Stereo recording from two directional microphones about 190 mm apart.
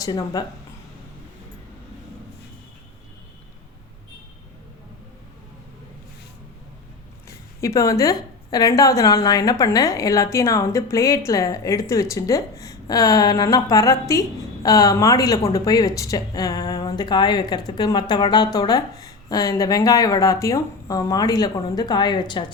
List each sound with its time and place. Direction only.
0.0 s a woman's voice: 20° left (ahead or behind)
7.6 s a woman's voice: 15° left (ahead or behind)